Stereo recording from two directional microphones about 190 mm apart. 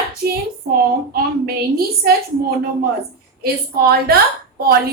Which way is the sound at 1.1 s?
55° right (ahead or behind).